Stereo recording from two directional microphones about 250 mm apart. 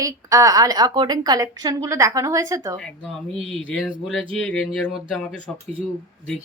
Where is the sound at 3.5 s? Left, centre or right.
Centre.